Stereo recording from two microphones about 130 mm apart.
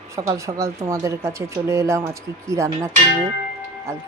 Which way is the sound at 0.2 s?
25° right (ahead or behind).